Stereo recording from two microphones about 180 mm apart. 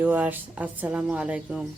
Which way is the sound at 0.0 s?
10° right (ahead or behind).